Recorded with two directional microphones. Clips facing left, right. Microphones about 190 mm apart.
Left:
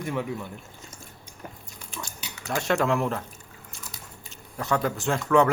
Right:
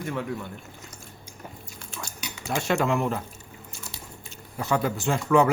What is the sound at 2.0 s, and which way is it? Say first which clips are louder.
Speech: right 1 dB; centre (ahead or behind).